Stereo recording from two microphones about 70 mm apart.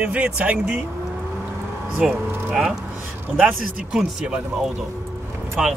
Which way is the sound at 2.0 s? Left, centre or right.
Centre.